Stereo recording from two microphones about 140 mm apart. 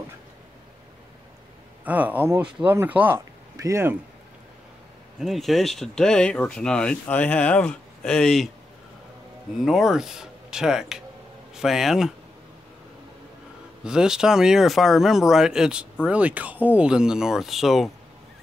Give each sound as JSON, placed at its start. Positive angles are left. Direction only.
{"t": 1.9, "sound": "speech", "side_deg": -10}
{"t": 5.2, "sound": "speech", "side_deg": 0}
{"t": 9.7, "sound": "speech", "side_deg": -5}
{"t": 13.8, "sound": "speech", "side_deg": -5}